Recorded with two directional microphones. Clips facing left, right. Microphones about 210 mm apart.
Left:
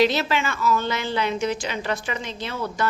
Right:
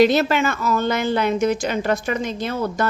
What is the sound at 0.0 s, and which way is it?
A woman's voice, 50° right (ahead or behind).